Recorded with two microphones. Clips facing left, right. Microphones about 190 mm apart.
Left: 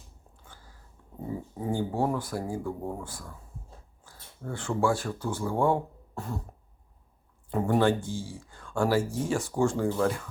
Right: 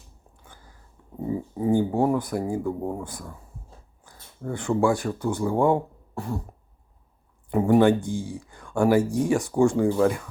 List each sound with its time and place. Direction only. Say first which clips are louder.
1.3 s speech: right 9 dB; 10° right (ahead or behind)
7.5 s speech: right 6 dB; 15° right (ahead or behind)